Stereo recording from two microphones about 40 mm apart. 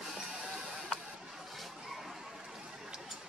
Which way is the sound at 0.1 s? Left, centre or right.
Right.